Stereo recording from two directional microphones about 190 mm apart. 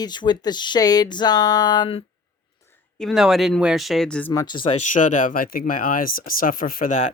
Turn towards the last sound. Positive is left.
turn(degrees=40)  # may be behind; listen again after turning